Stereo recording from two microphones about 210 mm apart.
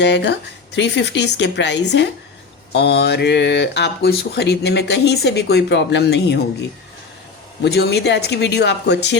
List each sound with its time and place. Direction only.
0.0 s a woman's voice: 55° left (ahead or behind)